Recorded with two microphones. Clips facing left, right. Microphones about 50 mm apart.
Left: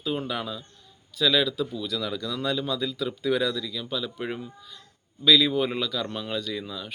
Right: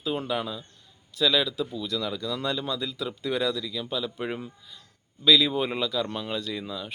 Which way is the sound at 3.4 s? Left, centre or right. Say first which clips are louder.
Even; centre.